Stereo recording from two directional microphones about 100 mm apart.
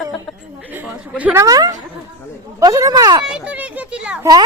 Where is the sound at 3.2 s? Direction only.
10° right (ahead or behind).